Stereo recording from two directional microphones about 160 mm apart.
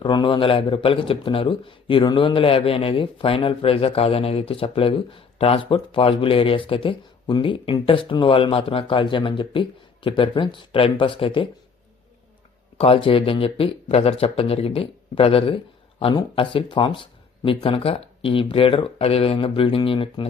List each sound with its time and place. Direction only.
0.0 s speech: 30° left (ahead or behind)
12.8 s speech: 35° left (ahead or behind)